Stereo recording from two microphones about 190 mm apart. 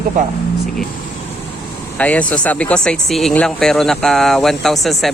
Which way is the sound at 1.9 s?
5° left (ahead or behind).